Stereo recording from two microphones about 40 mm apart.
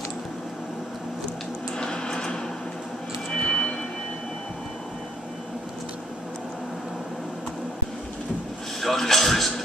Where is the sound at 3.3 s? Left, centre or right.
Left.